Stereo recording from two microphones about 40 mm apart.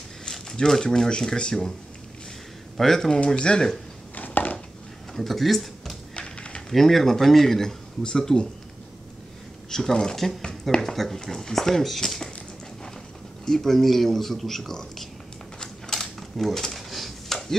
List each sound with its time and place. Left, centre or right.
0.2 s speech: centre
2.8 s speech: centre
3.3 s speech: left
4.1 s a sound: left
5.1 s speech: centre
6.1 s a sound: left
6.7 s speech: centre
9.7 s speech: centre
13.5 s speech: centre
15.6 s cutlery: centre